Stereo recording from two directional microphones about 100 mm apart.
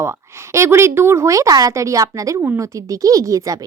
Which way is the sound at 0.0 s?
25° right (ahead or behind).